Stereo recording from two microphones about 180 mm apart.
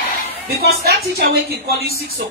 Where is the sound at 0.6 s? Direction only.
60° right (ahead or behind).